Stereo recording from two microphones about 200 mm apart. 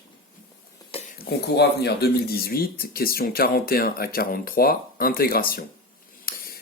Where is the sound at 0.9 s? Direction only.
30° left (ahead or behind).